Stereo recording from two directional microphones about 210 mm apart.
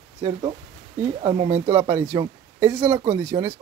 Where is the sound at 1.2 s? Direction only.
25° right (ahead or behind).